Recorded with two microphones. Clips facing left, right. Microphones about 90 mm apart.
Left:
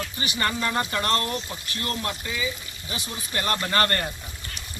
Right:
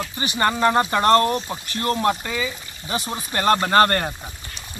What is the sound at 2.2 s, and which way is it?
Speech, 55° right (ahead or behind).